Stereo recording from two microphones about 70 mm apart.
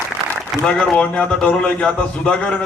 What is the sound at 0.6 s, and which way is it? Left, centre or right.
A man's voice, centre.